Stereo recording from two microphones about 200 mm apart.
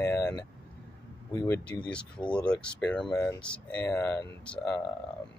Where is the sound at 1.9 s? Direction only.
5° left (ahead or behind).